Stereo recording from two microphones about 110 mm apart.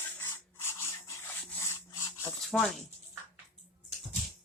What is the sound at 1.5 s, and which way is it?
Rub, 25° left (ahead or behind).